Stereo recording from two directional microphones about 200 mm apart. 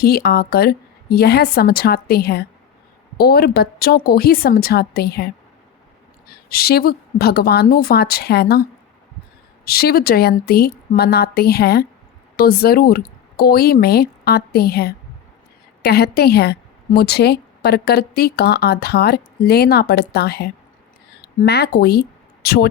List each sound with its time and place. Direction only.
0.0 s a woman's voice: 50° left (ahead or behind)
9.6 s a woman's voice: 50° left (ahead or behind)